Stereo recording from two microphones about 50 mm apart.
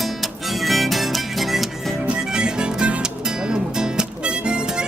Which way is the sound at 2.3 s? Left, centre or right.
Centre.